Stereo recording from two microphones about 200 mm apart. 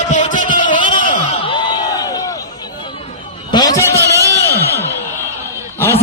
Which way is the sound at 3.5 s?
20° left (ahead or behind).